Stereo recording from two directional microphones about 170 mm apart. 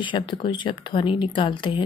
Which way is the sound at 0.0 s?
30° left (ahead or behind).